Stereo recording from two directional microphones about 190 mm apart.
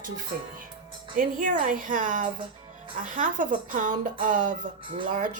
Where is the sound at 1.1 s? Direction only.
45° right (ahead or behind).